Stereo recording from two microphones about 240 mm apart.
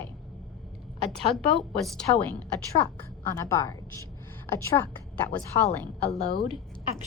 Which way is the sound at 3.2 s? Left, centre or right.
Centre.